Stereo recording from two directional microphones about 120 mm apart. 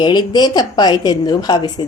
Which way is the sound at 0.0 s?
35° left (ahead or behind).